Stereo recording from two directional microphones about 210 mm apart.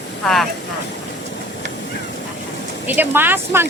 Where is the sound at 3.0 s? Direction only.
10° right (ahead or behind).